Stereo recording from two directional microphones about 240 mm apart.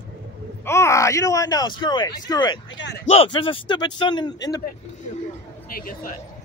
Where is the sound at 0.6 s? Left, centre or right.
Centre.